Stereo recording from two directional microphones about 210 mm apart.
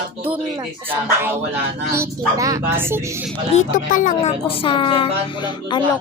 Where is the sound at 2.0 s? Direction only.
15° right (ahead or behind).